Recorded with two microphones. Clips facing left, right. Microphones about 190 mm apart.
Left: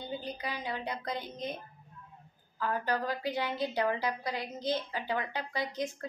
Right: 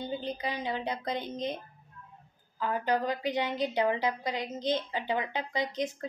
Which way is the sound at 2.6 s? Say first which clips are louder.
Right 3 dB; 20° right (ahead or behind).